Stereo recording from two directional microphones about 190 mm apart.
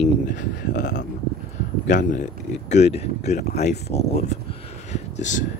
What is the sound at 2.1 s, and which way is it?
Speech, 40° left (ahead or behind).